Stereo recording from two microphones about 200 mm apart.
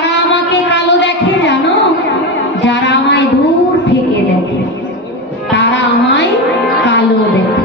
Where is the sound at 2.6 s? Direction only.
60° left (ahead or behind).